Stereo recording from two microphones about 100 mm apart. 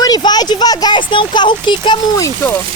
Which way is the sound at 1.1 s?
50° left (ahead or behind).